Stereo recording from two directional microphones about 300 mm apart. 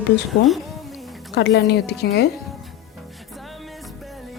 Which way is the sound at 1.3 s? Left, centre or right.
Left.